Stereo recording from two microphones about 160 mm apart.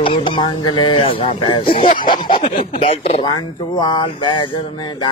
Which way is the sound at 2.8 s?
40° left (ahead or behind).